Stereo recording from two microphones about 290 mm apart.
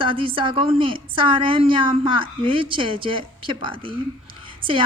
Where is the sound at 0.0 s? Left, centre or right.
Centre.